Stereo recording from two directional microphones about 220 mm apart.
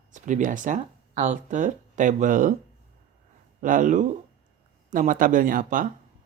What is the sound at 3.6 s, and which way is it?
Speech, 35° right (ahead or behind).